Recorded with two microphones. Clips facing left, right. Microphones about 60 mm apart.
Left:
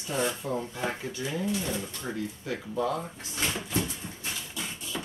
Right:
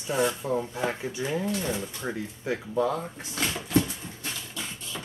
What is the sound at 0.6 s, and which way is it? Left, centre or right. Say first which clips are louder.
Speech: right 3 dB; right.